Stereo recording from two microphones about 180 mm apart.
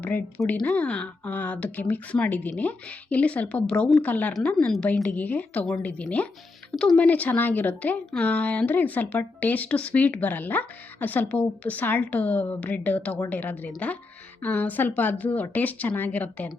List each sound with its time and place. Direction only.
0.0 s a woman's voice: 10° left (ahead or behind)